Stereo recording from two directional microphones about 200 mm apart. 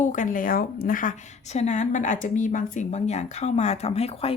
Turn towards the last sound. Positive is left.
turn(degrees=30)  # may be behind; listen again after turning